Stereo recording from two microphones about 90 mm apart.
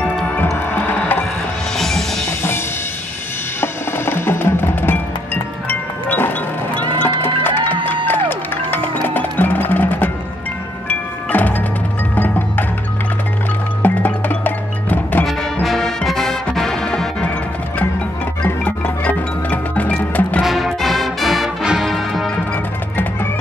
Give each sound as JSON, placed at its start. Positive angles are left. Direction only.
{"t": 0.6, "sound": "music", "side_deg": 20}
{"t": 1.8, "sound": "music", "side_deg": 5}
{"t": 2.2, "sound": "music", "side_deg": 25}
{"t": 3.6, "sound": "percussion", "side_deg": 25}
{"t": 7.0, "sound": "music", "side_deg": 25}
{"t": 13.8, "sound": "music", "side_deg": 20}
{"t": 15.2, "sound": "music", "side_deg": 0}
{"t": 18.4, "sound": "music", "side_deg": 15}
{"t": 20.4, "sound": "music", "side_deg": 0}
{"t": 22.3, "sound": "music", "side_deg": 15}